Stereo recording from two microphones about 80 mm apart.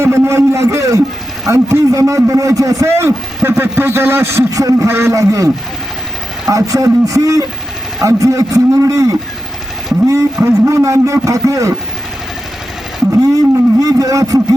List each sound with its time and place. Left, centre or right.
0.0 s a man's voice: right
4.5 s a man's voice: right
4.9 s a man's voice: right
6.5 s a man's voice: right
10.4 s a man's voice: right
13.3 s speech: right